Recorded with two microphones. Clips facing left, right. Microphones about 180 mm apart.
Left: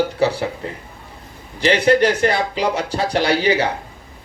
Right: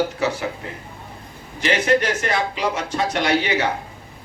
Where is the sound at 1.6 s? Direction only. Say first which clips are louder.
Left 5 dB; 30° left (ahead or behind).